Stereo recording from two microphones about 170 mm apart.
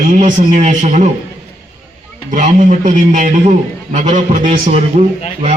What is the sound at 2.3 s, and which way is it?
A man's voice, 45° right (ahead or behind).